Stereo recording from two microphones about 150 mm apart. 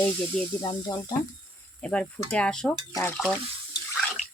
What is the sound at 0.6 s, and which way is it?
Speech, 25° left (ahead or behind).